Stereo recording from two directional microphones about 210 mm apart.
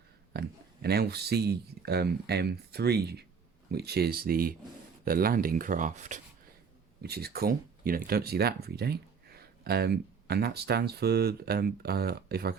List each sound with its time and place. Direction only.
0.3 s speech: 50° right (ahead or behind)
7.0 s speech: 50° right (ahead or behind)